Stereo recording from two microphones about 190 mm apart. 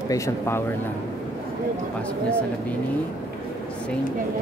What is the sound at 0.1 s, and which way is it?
Speech, 15° left (ahead or behind).